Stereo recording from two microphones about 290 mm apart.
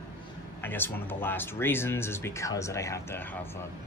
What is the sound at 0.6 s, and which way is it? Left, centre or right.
Speech, centre.